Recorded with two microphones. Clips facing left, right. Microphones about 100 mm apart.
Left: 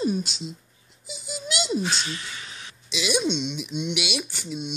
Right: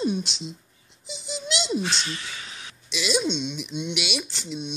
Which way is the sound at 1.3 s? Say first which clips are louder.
Even; 5° left (ahead or behind).